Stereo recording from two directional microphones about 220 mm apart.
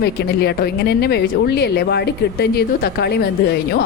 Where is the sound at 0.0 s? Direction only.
50° left (ahead or behind).